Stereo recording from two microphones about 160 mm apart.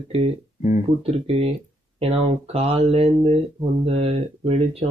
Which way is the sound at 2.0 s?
40° right (ahead or behind).